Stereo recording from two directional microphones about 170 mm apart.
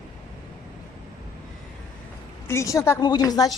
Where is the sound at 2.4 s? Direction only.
15° left (ahead or behind).